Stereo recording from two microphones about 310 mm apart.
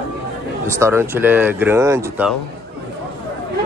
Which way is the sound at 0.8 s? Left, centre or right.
Centre.